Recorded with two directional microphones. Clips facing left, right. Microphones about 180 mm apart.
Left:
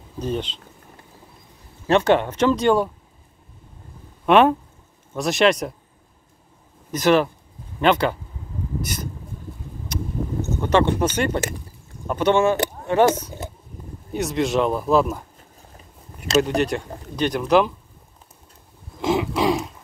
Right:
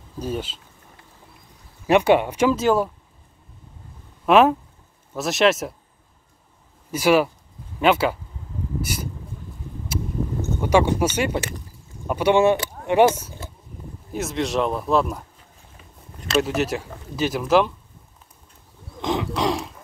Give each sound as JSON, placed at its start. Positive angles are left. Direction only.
{"t": 0.2, "sound": "speech", "side_deg": -5}
{"t": 1.9, "sound": "speech", "side_deg": -10}
{"t": 4.3, "sound": "a man's voice", "side_deg": -5}
{"t": 6.9, "sound": "a man's voice", "side_deg": -10}
{"t": 9.9, "sound": "boat", "side_deg": -5}
{"t": 10.6, "sound": "speech", "side_deg": -10}
{"t": 14.1, "sound": "a man's voice", "side_deg": 0}
{"t": 16.3, "sound": "a man's voice", "side_deg": -5}
{"t": 18.9, "sound": "a man's voice", "side_deg": 5}